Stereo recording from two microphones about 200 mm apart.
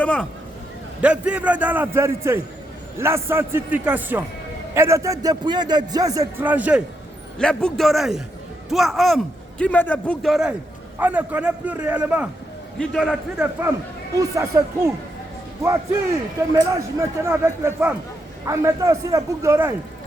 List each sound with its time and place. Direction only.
0.0 s speech: 5° left (ahead or behind)
1.0 s a man's voice: 5° right (ahead or behind)
7.3 s a man's voice: 5° left (ahead or behind)
14.2 s a man's voice: 15° right (ahead or behind)